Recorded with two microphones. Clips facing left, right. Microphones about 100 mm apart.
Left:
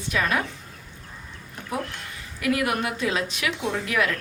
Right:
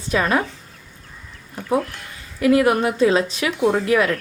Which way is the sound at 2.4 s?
30° right (ahead or behind).